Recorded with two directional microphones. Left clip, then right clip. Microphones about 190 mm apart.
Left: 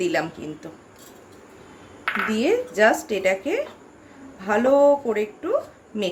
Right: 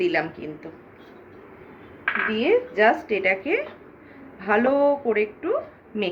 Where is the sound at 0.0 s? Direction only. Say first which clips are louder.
Even; 45° left (ahead or behind).